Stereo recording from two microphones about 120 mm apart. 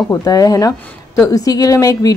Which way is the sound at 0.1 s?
30° left (ahead or behind).